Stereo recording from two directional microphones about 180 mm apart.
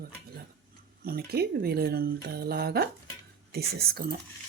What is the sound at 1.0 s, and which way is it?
Speech, 60° right (ahead or behind).